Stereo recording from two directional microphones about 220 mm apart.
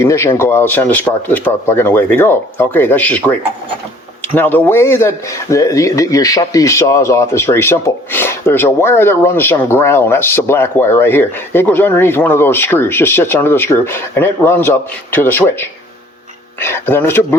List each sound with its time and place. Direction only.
0.0 s a man's voice: 10° left (ahead or behind)
4.4 s a man's voice: 10° left (ahead or behind)